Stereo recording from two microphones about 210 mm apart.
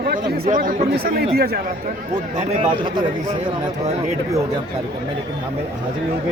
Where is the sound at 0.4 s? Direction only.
40° right (ahead or behind).